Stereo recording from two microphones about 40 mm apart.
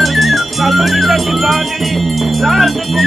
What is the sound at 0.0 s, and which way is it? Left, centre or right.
Speech, centre.